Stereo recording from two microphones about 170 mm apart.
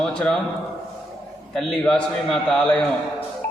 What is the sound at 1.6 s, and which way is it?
A man's voice, 5° left (ahead or behind).